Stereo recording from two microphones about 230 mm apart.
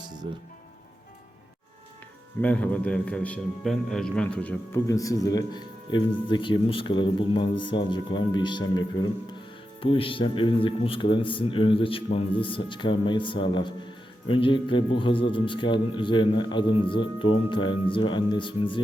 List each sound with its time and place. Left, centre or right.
2.4 s a man's voice: centre; by 18.8 s left